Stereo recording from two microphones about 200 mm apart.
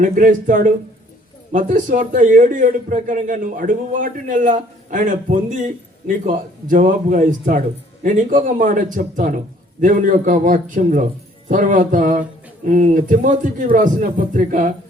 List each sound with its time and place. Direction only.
0.0 s a man's voice: 40° right (ahead or behind)